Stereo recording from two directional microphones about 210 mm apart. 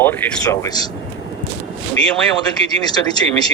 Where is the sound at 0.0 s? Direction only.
10° left (ahead or behind).